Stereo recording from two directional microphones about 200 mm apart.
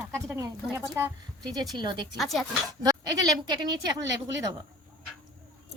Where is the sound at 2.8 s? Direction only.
20° right (ahead or behind).